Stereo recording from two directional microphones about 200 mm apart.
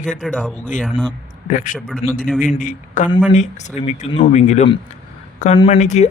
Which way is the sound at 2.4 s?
40° left (ahead or behind).